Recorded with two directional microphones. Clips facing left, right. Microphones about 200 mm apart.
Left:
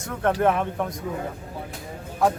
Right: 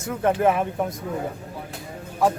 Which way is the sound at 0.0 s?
5° right (ahead or behind).